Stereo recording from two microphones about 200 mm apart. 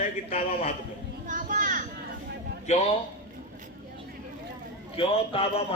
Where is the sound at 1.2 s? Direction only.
40° right (ahead or behind).